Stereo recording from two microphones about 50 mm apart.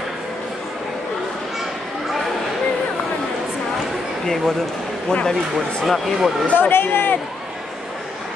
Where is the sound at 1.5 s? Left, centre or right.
Centre.